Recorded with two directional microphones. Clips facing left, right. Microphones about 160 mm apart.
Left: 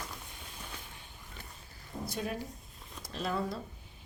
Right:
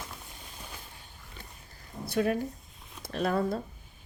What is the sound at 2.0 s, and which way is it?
Speech, 65° right (ahead or behind).